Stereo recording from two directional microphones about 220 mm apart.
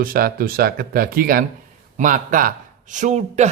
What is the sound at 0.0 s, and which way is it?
Speech, 40° right (ahead or behind).